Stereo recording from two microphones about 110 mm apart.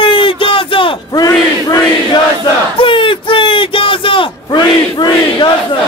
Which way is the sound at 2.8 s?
50° left (ahead or behind).